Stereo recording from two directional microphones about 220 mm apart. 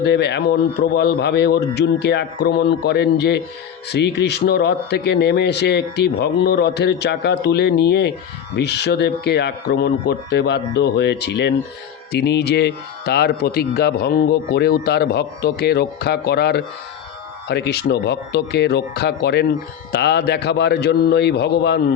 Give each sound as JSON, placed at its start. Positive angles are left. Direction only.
{"t": 0.0, "sound": "speech", "side_deg": 50}